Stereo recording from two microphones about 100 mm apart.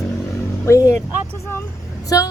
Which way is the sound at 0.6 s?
30° left (ahead or behind).